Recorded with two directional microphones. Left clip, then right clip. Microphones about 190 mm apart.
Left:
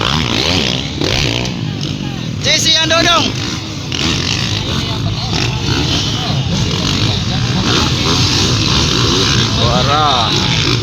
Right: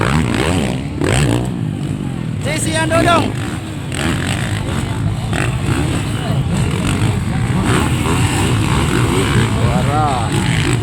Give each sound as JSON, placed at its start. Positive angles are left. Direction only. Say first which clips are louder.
{"t": 0.0, "sound": "a sound", "louder": "left 3 dB", "side_deg": 35}
{"t": 2.5, "sound": "vehicle", "louder": "left 6 dB", "side_deg": -10}
{"t": 9.3, "sound": "vehicle", "louder": "left 4 dB", "side_deg": 0}